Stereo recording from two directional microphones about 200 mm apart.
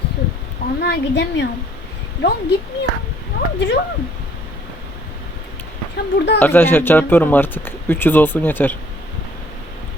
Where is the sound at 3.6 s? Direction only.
60° left (ahead or behind).